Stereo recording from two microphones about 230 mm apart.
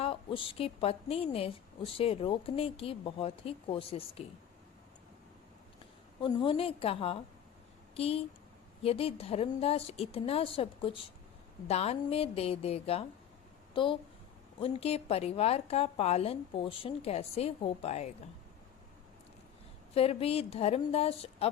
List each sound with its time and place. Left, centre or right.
0.0 s a woman's voice: left
6.1 s a woman's voice: left
19.9 s a woman's voice: left